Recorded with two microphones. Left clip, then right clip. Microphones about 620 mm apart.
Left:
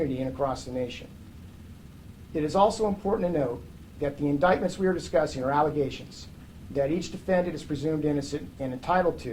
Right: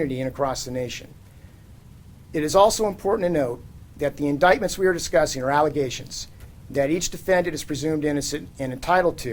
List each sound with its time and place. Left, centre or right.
0.2 s speech: right
2.3 s speech: right
6.7 s speech: right